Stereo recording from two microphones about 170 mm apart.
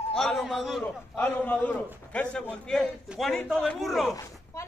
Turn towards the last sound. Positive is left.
turn(degrees=15)  # may be behind; listen again after turning